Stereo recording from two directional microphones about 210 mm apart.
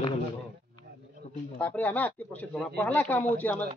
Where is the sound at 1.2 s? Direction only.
30° left (ahead or behind).